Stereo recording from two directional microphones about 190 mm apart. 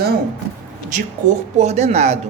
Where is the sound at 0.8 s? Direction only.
40° right (ahead or behind).